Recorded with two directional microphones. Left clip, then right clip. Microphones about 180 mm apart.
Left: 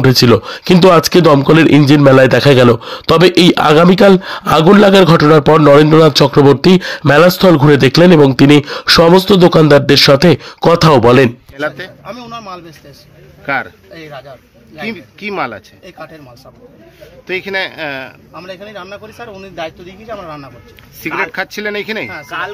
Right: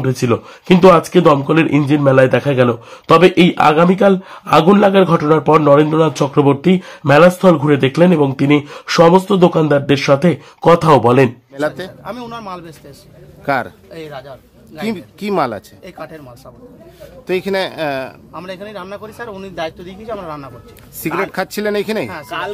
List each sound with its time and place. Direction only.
0.0 s speech: 40° left (ahead or behind)
12.1 s speech: 35° right (ahead or behind)
13.5 s a man's voice: 50° right (ahead or behind)
17.3 s speech: 55° right (ahead or behind)
18.4 s speech: 35° right (ahead or behind)
21.0 s speech: 55° right (ahead or behind)